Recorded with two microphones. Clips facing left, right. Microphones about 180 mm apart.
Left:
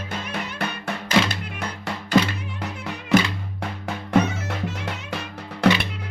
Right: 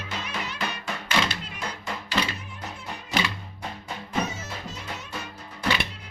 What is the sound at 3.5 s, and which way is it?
Music, 75° left (ahead or behind).